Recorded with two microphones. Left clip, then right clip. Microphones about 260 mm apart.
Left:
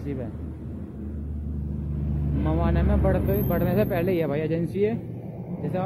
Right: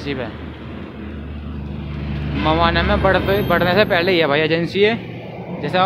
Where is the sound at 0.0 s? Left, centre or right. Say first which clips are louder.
Right 9 dB; centre.